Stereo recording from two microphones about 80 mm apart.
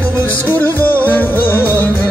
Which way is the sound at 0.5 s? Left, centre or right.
Left.